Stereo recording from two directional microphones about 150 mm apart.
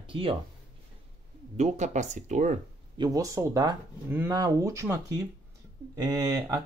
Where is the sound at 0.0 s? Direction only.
35° right (ahead or behind).